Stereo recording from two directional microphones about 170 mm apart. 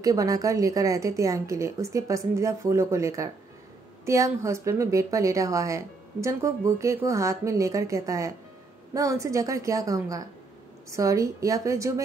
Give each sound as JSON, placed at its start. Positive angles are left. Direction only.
{"t": 0.0, "sound": "speech", "side_deg": -20}